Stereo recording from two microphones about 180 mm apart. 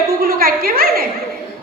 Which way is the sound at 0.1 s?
55° right (ahead or behind).